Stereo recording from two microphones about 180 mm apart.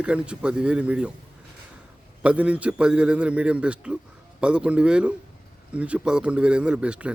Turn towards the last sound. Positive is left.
turn(degrees=-5)  # may be behind; listen again after turning